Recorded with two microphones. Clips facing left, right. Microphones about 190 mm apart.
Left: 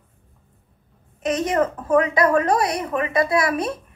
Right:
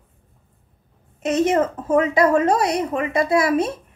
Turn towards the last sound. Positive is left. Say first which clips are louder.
# right 3 dB
turn(degrees=-25)  # may be behind; listen again after turning